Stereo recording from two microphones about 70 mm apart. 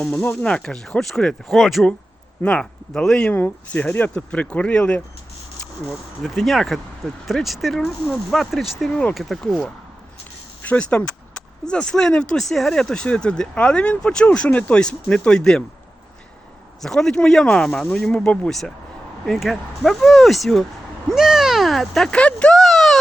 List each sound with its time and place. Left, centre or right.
0.3 s speech: centre
2.4 s speech: centre
3.3 s speech: left
4.1 s speech: centre
5.9 s speech: centre
8.9 s speech: centre
9.1 s speech: centre
10.6 s speech: centre
16.8 s speech: centre
22.1 s speech: centre
22.6 s a sound: centre